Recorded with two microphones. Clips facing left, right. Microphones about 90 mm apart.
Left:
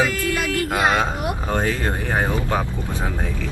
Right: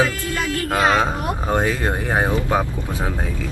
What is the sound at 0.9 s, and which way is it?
Speech, 20° right (ahead or behind).